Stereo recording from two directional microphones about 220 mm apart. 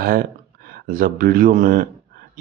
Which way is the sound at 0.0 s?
40° right (ahead or behind).